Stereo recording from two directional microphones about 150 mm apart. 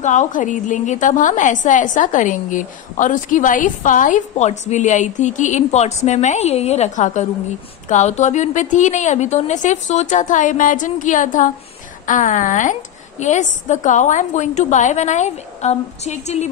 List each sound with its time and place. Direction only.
0.0 s a woman's voice: 55° left (ahead or behind)